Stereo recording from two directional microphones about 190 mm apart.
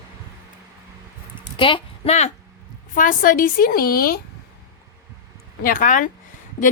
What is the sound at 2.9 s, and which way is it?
A woman's voice, 45° left (ahead or behind).